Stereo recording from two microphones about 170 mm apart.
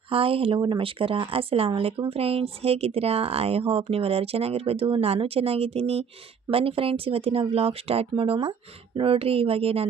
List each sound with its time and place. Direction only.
0.1 s speech: 35° right (ahead or behind)